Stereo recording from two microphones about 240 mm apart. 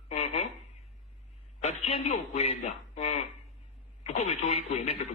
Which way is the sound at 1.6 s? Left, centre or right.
Left.